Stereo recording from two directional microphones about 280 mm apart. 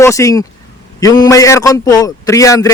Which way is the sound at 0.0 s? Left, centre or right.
Centre.